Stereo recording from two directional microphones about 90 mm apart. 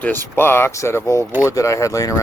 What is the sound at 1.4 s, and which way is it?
Speech, 35° left (ahead or behind).